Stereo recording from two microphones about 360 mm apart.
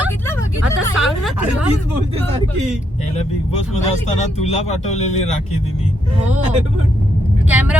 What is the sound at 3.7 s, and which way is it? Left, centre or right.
Speech, centre.